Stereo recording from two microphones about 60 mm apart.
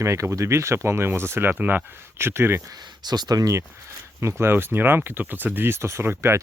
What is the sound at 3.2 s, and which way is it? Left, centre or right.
Speech, right.